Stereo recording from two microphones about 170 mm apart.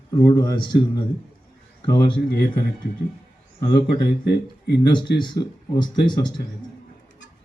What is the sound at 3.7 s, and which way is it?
Speech, 70° left (ahead or behind).